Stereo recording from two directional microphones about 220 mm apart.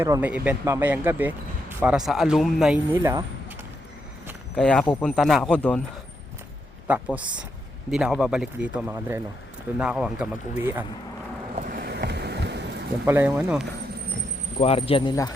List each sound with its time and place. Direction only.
0.0 s speech: 10° right (ahead or behind)
4.5 s speech: 5° left (ahead or behind)
6.8 s speech: 5° right (ahead or behind)
11.5 s vehicle: 40° right (ahead or behind)
13.1 s speech: 10° right (ahead or behind)
14.6 s speech: 25° left (ahead or behind)